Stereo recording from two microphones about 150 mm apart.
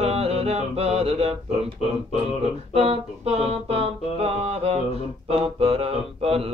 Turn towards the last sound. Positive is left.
turn(degrees=-40)  # may be behind; listen again after turning